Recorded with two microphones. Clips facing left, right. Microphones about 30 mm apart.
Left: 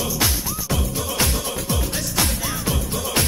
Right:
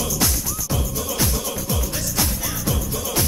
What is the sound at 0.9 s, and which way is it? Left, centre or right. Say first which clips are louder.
Music: left 1 dB; left.